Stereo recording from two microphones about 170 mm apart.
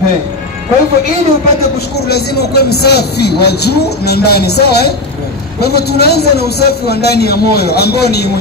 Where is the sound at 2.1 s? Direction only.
70° left (ahead or behind).